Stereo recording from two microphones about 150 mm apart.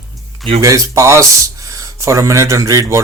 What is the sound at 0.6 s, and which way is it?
Speech, 20° right (ahead or behind).